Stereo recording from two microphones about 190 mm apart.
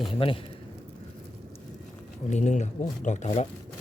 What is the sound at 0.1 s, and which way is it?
Speech, 30° left (ahead or behind).